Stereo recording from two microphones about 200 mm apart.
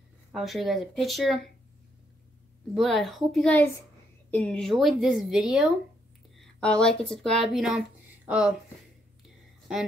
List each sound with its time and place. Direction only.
0.3 s speech: centre (ahead or behind)
2.7 s speech: centre (ahead or behind)